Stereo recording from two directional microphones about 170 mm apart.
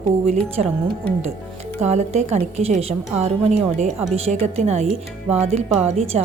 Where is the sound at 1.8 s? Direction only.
40° right (ahead or behind).